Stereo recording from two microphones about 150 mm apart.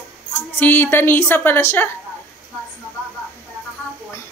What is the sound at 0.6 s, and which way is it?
A woman's voice, 10° left (ahead or behind).